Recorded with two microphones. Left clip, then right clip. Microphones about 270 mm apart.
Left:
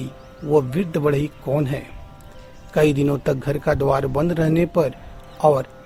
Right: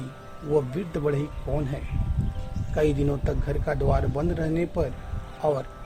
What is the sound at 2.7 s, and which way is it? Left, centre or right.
A man's voice, left.